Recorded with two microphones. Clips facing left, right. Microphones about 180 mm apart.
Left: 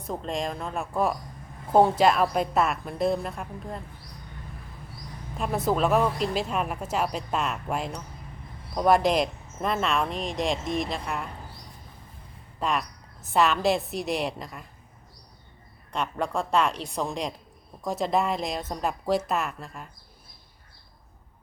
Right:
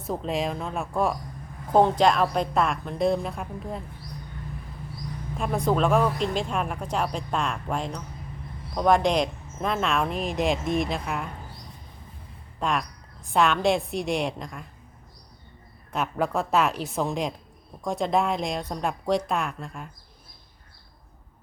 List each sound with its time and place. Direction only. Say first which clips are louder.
0.0 s speech: right 3 dB; centre (ahead or behind)
5.4 s speech: right 1 dB; 5° left (ahead or behind)
12.5 s speech: right 1 dB; centre (ahead or behind)
15.9 s speech: right 2 dB; 5° right (ahead or behind)